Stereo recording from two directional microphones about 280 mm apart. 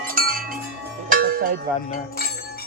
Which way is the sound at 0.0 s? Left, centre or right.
Right.